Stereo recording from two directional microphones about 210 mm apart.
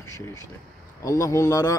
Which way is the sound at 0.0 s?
15° left (ahead or behind).